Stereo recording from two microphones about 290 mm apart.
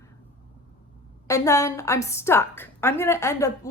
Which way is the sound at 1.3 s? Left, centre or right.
Centre.